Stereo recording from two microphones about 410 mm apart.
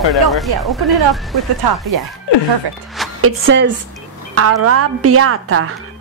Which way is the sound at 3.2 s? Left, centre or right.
Right.